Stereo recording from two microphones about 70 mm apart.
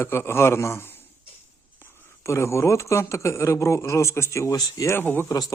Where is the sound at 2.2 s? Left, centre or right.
Left.